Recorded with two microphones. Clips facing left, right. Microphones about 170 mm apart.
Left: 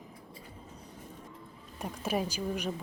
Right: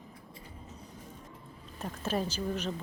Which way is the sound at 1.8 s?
10° left (ahead or behind).